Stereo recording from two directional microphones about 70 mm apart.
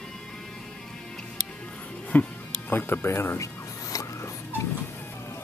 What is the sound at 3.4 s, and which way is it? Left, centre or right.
Music, left.